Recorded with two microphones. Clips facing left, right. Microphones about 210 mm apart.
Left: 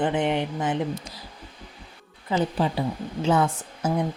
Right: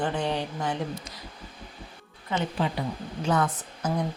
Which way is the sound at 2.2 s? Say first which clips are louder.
Left 4 dB; 35° left (ahead or behind).